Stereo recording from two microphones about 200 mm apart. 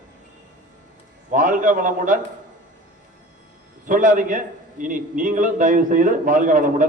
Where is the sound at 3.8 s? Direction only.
40° right (ahead or behind).